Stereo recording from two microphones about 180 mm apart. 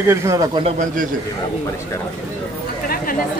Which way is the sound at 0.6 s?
45° right (ahead or behind).